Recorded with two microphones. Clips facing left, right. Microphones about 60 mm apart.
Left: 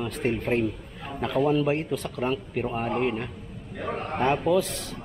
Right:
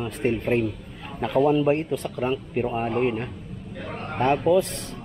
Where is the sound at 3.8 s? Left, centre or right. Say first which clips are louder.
Left 3 dB; centre.